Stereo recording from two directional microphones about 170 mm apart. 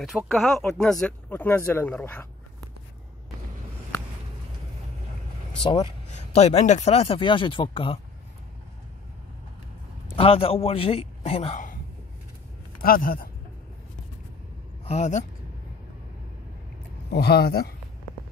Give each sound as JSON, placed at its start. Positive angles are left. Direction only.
{"t": 0.3, "sound": "speech", "side_deg": 0}
{"t": 6.3, "sound": "speech", "side_deg": 40}
{"t": 10.1, "sound": "speech", "side_deg": 35}
{"t": 12.8, "sound": "speech", "side_deg": 60}
{"t": 14.9, "sound": "speech", "side_deg": 45}
{"t": 17.1, "sound": "speech", "side_deg": 70}